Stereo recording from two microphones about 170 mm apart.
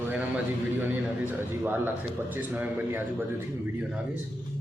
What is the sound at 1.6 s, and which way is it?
A man's voice, 10° right (ahead or behind).